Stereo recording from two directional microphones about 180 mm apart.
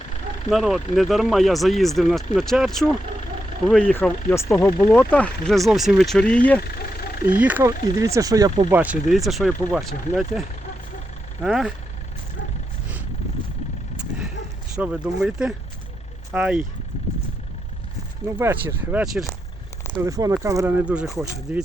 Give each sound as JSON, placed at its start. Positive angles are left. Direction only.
{"t": 0.5, "sound": "speech", "side_deg": 0}
{"t": 7.3, "sound": "speech", "side_deg": -10}
{"t": 8.7, "sound": "speech", "side_deg": -10}
{"t": 11.4, "sound": "speech", "side_deg": -5}
{"t": 13.9, "sound": "vehicle", "side_deg": -5}
{"t": 14.8, "sound": "speech", "side_deg": -5}
{"t": 18.3, "sound": "speech", "side_deg": -10}
{"t": 20.0, "sound": "speech", "side_deg": -20}